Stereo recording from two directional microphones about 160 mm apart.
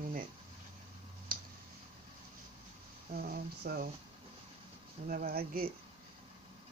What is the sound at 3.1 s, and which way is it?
Speech, 70° right (ahead or behind).